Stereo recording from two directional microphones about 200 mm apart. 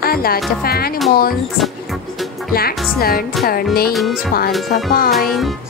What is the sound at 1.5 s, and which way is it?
Music, centre (ahead or behind).